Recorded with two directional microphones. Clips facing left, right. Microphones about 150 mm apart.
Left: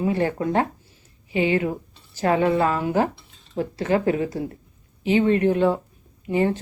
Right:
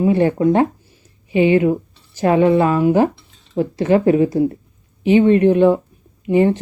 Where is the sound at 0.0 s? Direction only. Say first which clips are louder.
Right 8 dB; 20° right (ahead or behind).